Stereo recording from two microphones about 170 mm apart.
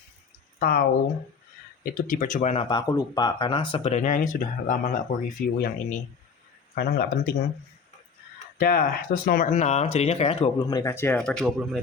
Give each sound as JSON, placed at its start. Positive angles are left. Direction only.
{"t": 0.6, "sound": "speech", "side_deg": 65}
{"t": 1.8, "sound": "speech", "side_deg": 50}
{"t": 2.9, "sound": "speech", "side_deg": 25}
{"t": 3.9, "sound": "speech", "side_deg": 50}
{"t": 6.7, "sound": "speech", "side_deg": 65}
{"t": 8.5, "sound": "speech", "side_deg": 60}
{"t": 10.6, "sound": "speech", "side_deg": 20}
{"t": 11.3, "sound": "speech", "side_deg": 0}